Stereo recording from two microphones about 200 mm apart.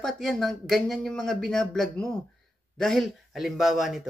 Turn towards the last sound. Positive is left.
turn(degrees=0)  # may be behind; listen again after turning